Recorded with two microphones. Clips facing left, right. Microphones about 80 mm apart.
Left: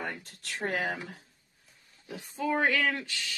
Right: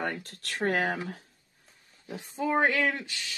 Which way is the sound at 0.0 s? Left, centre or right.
Right.